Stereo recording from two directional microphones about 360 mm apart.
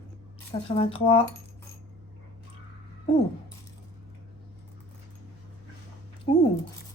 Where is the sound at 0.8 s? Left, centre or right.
Centre.